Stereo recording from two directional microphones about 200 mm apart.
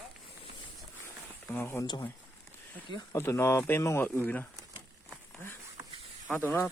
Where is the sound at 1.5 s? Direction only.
10° left (ahead or behind).